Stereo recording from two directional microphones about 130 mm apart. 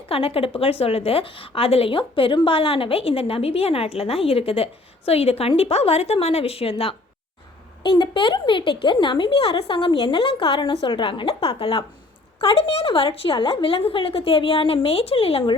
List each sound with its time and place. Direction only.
0.1 s a woman's voice: 45° left (ahead or behind)
7.9 s a woman's voice: 35° left (ahead or behind)